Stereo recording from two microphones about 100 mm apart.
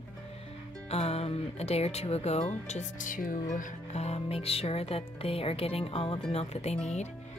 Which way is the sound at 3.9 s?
90° left.